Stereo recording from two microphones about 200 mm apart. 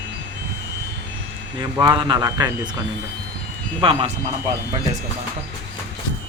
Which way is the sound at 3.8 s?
25° right (ahead or behind).